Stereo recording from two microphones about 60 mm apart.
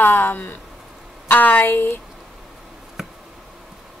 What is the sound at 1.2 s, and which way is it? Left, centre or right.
Speech, left.